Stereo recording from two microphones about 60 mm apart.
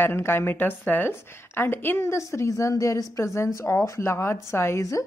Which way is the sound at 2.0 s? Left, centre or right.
Left.